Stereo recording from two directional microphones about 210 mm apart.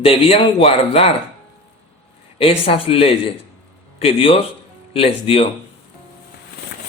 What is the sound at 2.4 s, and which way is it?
A man's voice, 25° left (ahead or behind).